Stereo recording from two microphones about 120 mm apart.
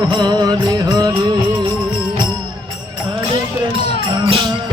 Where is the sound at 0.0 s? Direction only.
35° right (ahead or behind).